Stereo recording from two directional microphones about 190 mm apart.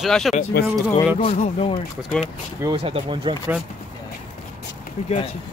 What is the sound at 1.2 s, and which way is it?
Speech, 30° left (ahead or behind).